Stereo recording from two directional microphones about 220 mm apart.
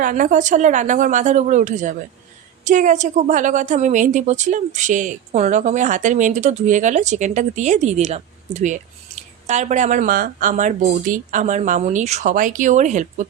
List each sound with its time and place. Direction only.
0.0 s a woman's voice: 35° right (ahead or behind)